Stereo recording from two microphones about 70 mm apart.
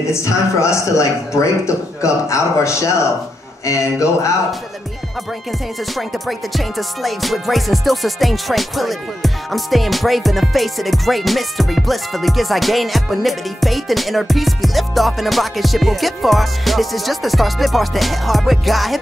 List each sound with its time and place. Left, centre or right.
0.0 s speech: left
5.9 s music: centre